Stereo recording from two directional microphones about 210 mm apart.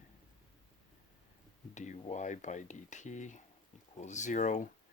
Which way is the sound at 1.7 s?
35° left (ahead or behind).